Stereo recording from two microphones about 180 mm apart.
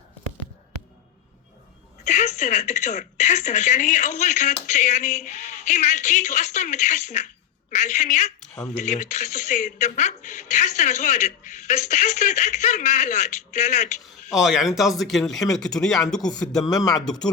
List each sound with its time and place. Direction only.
2.0 s speech: 40° left (ahead or behind)
14.3 s speech: centre (ahead or behind)
16.6 s speech: 20° left (ahead or behind)